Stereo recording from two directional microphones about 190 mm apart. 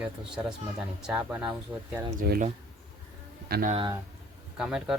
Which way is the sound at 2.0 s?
40° right (ahead or behind).